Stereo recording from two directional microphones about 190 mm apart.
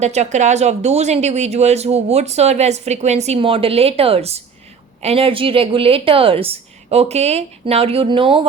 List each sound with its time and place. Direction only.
0.0 s a woman's voice: 35° right (ahead or behind)